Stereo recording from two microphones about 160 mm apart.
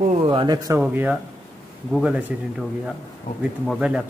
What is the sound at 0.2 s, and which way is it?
Speech, 35° right (ahead or behind).